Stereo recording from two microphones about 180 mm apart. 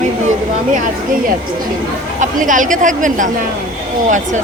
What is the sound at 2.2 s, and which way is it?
Speech, 45° right (ahead or behind).